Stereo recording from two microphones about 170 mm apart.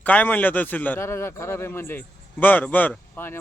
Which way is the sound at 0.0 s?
10° left (ahead or behind).